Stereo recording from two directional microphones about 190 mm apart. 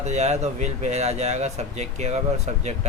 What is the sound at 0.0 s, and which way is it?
Speech, 35° right (ahead or behind).